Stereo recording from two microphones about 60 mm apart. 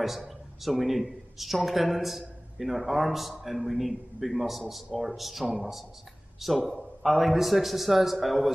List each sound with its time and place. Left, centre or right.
0.0 s speech: centre